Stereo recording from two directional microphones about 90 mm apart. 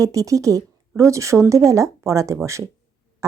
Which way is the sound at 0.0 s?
40° right (ahead or behind).